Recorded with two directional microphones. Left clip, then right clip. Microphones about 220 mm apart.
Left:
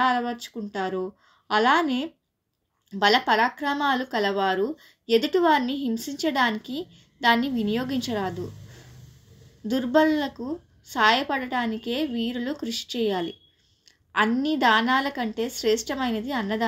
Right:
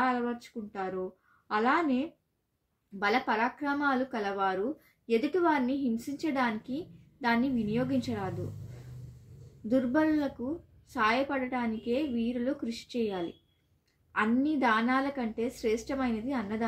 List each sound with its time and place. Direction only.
0.0 s speech: 40° left (ahead or behind)
9.7 s speech: 35° left (ahead or behind)